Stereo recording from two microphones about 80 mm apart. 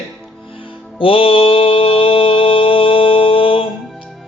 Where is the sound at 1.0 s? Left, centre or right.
Left.